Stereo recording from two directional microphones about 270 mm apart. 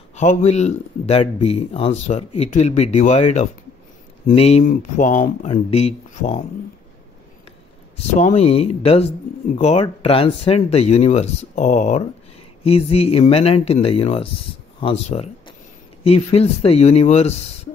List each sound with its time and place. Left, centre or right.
0.1 s speech: left
8.2 s speech: left